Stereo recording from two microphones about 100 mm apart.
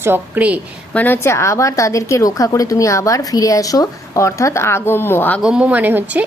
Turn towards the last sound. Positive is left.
turn(degrees=-15)  # may be behind; listen again after turning